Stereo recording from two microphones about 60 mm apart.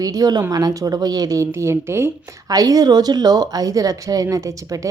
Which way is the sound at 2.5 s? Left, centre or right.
Right.